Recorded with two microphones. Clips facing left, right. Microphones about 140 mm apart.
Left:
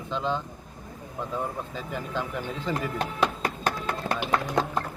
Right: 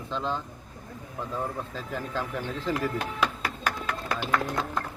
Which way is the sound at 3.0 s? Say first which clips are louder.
Left 2 dB; 30° left (ahead or behind).